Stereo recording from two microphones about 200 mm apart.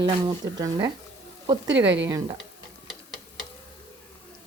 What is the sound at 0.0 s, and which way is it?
Speech, 20° right (ahead or behind).